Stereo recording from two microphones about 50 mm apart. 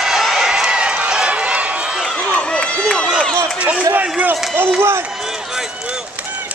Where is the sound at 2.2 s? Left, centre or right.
Left.